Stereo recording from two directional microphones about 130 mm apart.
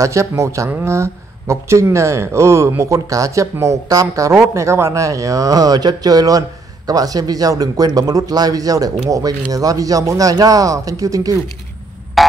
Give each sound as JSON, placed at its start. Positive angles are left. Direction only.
{"t": 0.0, "sound": "speech", "side_deg": -25}
{"t": 12.2, "sound": "music", "side_deg": 0}